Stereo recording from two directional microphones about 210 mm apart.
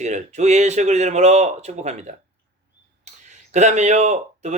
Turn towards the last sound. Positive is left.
turn(degrees=-35)  # may be behind; listen again after turning